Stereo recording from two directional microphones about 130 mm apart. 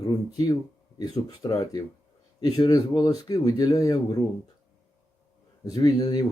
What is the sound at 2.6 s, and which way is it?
Speech, 30° left (ahead or behind).